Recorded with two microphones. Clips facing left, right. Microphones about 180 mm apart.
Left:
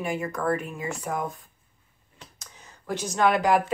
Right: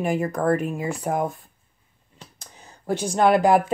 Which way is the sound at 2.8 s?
30° right (ahead or behind).